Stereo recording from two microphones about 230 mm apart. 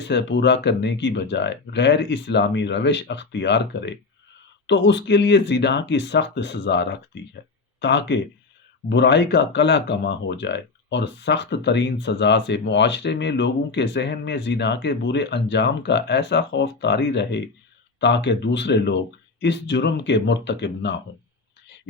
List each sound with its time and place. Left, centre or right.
0.0 s speech: left